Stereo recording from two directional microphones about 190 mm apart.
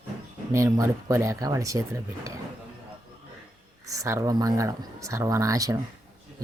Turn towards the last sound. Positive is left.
turn(degrees=-15)  # may be behind; listen again after turning